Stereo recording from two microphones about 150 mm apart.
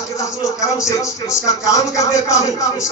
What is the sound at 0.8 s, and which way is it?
Speech, 20° left (ahead or behind).